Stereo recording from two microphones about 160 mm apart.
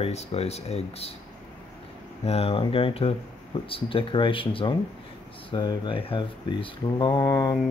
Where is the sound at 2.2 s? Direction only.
40° left (ahead or behind).